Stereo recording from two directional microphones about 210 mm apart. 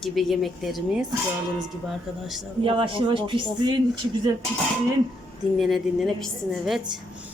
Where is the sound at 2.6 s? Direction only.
25° right (ahead or behind).